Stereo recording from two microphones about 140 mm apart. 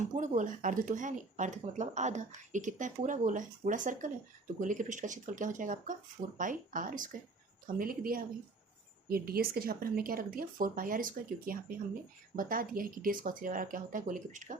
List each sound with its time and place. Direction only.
0.2 s speech: 65° right (ahead or behind)
7.8 s speech: 90° right; by 14.6 s 65° right (ahead or behind)